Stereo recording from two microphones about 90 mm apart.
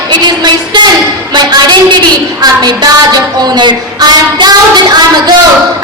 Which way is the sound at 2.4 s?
50° right (ahead or behind).